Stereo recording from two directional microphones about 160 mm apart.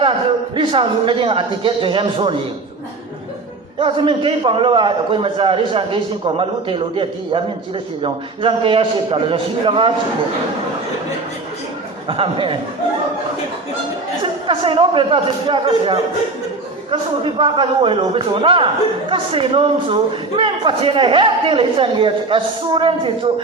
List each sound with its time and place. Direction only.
0.5 s a man's voice: 30° right (ahead or behind)
3.8 s a man's voice: 35° right (ahead or behind)
12.0 s a man's voice: 35° right (ahead or behind)
14.4 s a man's voice: 35° right (ahead or behind)